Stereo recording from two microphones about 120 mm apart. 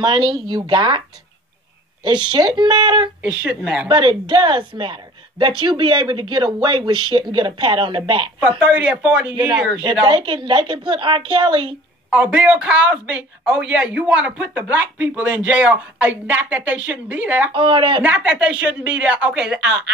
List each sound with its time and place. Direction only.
0.0 s speech: 40° right (ahead or behind)
2.0 s speech: 40° right (ahead or behind)
3.2 s speech: 10° right (ahead or behind)
3.9 s speech: 45° right (ahead or behind)
8.4 s speech: 10° right (ahead or behind)
9.3 s speech: 40° right (ahead or behind)
12.1 s speech: 10° right (ahead or behind)
17.5 s speech: 45° right (ahead or behind)
18.0 s speech: 10° right (ahead or behind)